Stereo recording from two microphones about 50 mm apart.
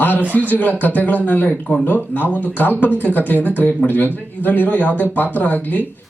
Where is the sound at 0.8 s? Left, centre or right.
Left.